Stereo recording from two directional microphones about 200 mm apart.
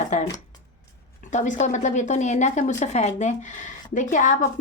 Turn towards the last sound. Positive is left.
turn(degrees=40)  # may be behind; listen again after turning